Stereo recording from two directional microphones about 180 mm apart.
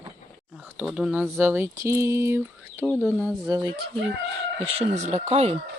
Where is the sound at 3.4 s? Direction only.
20° right (ahead or behind).